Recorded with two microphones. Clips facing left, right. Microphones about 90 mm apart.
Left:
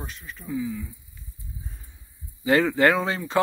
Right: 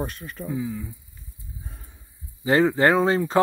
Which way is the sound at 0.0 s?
50° right (ahead or behind).